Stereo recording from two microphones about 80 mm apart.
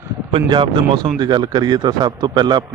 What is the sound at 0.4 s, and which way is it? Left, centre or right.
Speech, right.